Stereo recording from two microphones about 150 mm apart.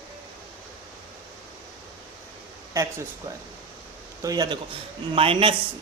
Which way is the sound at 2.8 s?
20° right (ahead or behind).